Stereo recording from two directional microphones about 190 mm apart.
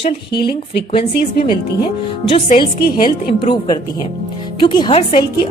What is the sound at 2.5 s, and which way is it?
Speech, 45° left (ahead or behind).